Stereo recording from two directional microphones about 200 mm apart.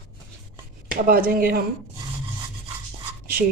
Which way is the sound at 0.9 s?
45° right (ahead or behind).